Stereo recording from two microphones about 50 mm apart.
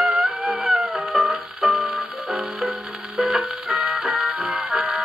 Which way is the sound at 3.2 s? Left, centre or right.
Right.